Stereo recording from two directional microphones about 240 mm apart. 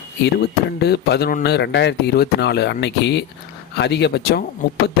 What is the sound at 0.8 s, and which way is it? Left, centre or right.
Speech, left.